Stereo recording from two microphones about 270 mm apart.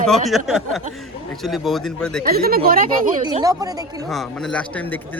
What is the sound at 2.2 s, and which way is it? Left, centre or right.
Speech, right.